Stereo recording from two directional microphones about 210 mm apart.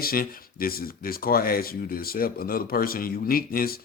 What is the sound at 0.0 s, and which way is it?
Speech, 45° left (ahead or behind).